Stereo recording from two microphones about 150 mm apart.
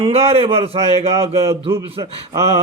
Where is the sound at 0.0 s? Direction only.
40° right (ahead or behind).